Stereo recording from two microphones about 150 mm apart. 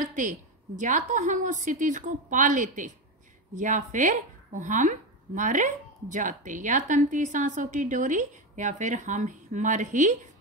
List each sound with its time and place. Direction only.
0.0 s speech: 55° right (ahead or behind)